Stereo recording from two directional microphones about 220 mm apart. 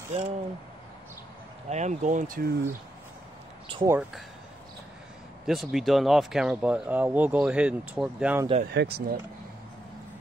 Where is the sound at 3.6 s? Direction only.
25° right (ahead or behind).